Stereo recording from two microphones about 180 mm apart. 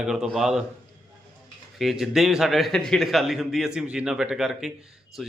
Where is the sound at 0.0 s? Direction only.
5° right (ahead or behind).